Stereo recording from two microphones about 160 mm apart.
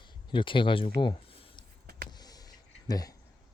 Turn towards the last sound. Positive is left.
turn(degrees=25)  # may be behind; listen again after turning